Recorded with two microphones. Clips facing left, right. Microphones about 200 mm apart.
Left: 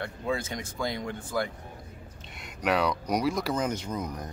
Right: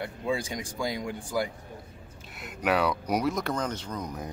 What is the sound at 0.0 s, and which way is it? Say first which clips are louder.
Speech: right 1 dB; 15° right (ahead or behind).